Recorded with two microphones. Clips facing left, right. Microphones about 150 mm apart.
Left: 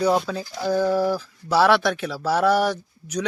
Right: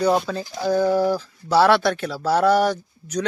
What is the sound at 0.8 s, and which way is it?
Speech, 5° left (ahead or behind).